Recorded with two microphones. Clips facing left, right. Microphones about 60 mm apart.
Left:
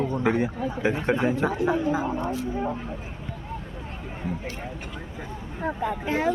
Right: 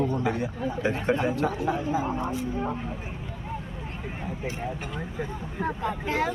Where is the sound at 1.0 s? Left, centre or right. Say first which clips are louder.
Even; centre.